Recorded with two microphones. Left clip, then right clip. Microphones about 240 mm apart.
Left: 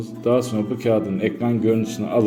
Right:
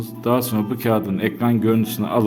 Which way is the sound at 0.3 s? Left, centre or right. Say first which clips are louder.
Left 1 dB; right.